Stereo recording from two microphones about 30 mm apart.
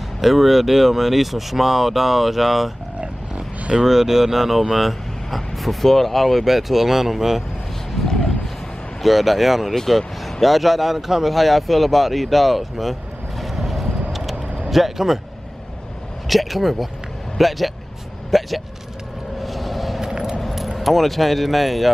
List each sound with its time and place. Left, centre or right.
0.2 s speech: centre
3.0 s roaring cats: right
3.8 s speech: centre
8.0 s a sound: centre
9.0 s speech: centre
11.3 s speech: centre
13.4 s vehicle: centre
14.7 s speech: centre
16.3 s speech: centre
19.4 s vehicle: centre
20.0 s vehicle: right
20.5 s speech: centre